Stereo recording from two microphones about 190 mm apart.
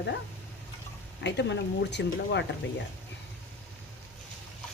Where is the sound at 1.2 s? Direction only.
65° left (ahead or behind).